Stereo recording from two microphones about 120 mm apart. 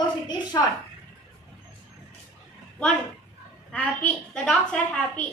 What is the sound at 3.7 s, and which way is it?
A woman's voice, 10° left (ahead or behind).